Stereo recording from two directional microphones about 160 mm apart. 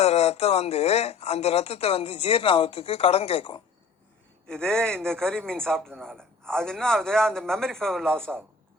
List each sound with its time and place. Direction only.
0.0 s speech: 45° left (ahead or behind)
4.4 s a man's voice: 5° left (ahead or behind)